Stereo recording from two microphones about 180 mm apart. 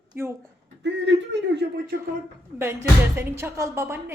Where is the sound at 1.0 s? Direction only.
70° right (ahead or behind).